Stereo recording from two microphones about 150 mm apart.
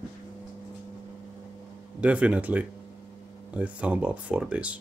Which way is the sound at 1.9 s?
10° right (ahead or behind).